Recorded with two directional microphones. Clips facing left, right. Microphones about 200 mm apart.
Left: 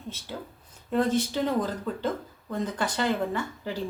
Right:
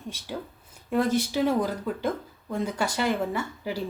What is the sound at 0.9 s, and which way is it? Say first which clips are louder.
Speech: right 1 dB; 10° right (ahead or behind).